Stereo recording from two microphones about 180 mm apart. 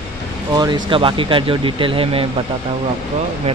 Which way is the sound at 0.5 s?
25° right (ahead or behind).